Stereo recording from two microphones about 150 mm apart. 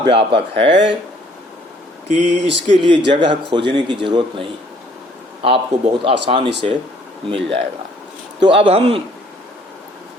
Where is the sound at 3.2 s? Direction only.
35° right (ahead or behind).